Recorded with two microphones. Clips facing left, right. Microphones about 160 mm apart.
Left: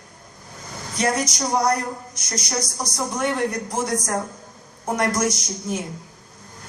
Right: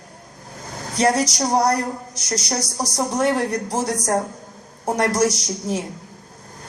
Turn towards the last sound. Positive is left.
turn(degrees=-35)  # may be behind; listen again after turning